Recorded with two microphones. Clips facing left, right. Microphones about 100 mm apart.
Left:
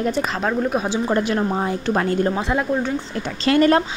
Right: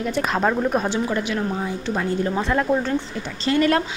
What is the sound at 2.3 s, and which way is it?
Speech, 15° left (ahead or behind).